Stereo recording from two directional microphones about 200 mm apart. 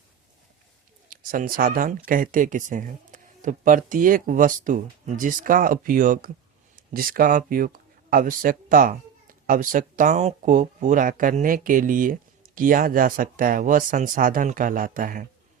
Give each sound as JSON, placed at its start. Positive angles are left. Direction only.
{"t": 1.1, "sound": "speech", "side_deg": -45}